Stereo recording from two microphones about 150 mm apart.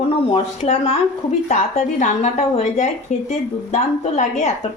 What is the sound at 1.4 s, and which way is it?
A woman's voice, 50° left (ahead or behind).